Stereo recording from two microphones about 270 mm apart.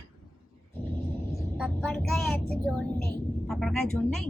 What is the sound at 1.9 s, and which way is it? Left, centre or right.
A man's voice, centre.